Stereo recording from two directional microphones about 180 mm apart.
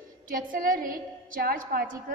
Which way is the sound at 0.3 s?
50° right (ahead or behind).